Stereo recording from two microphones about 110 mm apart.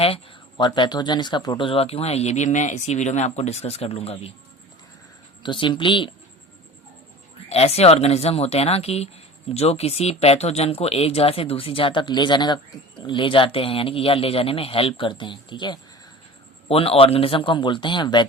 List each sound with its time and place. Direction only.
0.5 s speech: 45° left (ahead or behind); by 4.3 s 65° left (ahead or behind)
5.4 s a man's voice: 45° left (ahead or behind)
7.5 s speech: 70° left (ahead or behind); by 15.8 s 40° left (ahead or behind)
16.6 s a man's voice: 60° left (ahead or behind); by 18.3 s 45° left (ahead or behind)